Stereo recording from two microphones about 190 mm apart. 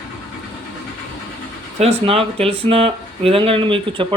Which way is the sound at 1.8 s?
30° right (ahead or behind).